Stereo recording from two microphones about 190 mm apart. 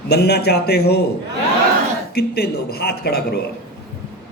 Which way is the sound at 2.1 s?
55° left (ahead or behind).